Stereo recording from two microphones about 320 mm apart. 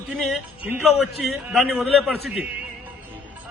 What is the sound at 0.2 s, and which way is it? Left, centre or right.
A man's voice, centre.